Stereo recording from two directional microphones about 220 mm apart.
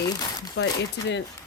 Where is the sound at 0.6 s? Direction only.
50° left (ahead or behind).